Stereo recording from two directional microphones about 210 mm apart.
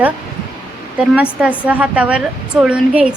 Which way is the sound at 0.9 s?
5° right (ahead or behind).